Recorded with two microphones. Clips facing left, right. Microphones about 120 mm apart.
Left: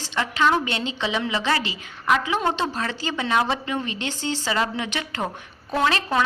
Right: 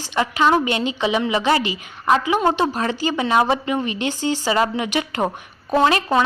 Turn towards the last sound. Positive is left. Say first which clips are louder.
# right 5 dB
turn(degrees=-15)  # may be behind; listen again after turning